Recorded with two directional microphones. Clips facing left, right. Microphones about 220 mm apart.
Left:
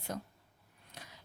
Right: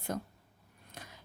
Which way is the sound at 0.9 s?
50° right (ahead or behind).